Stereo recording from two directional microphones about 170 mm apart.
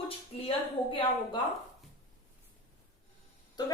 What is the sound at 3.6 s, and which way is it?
Speech, 25° left (ahead or behind).